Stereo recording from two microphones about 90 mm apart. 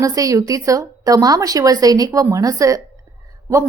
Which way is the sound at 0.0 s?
40° right (ahead or behind).